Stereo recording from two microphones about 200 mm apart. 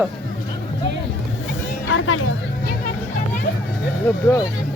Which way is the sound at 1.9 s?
75° left (ahead or behind).